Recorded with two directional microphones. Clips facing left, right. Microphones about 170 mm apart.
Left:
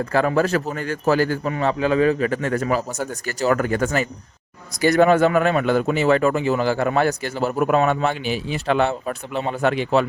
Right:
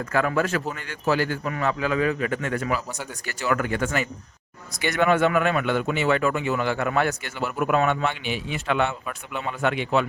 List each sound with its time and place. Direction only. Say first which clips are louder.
0.0 s speech: left 4 dB; 30° left (ahead or behind)
1.5 s speech: left 5 dB; 30° left (ahead or behind)